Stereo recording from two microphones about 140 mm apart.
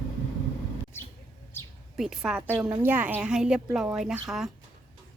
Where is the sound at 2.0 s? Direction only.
5° right (ahead or behind).